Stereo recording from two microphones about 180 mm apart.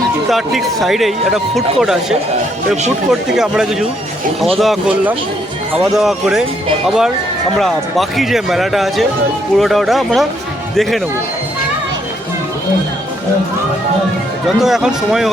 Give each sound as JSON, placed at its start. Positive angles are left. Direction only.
{"t": 0.3, "sound": "speech", "side_deg": 0}
{"t": 14.4, "sound": "speech", "side_deg": 0}